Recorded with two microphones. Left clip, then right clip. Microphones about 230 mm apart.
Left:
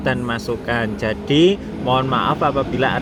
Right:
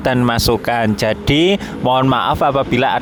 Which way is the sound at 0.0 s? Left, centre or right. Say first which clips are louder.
Right 6 dB; right.